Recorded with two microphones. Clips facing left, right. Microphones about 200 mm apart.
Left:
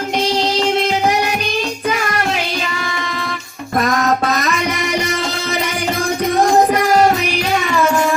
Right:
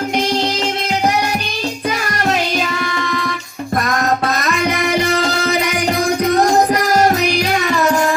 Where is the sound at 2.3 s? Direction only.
45° right (ahead or behind).